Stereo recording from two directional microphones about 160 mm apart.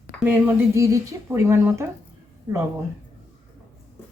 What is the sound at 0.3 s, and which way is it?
Speech, 15° right (ahead or behind).